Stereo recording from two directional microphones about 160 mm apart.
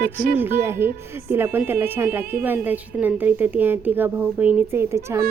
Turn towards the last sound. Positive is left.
turn(degrees=-15)  # may be behind; listen again after turning